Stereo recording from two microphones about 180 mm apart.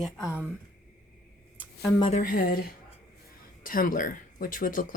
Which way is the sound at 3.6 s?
50° left (ahead or behind).